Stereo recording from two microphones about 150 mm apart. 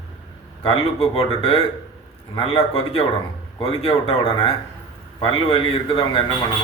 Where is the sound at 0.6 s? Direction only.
40° left (ahead or behind).